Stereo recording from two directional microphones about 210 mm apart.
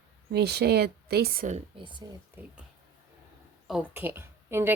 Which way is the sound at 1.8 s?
20° right (ahead or behind).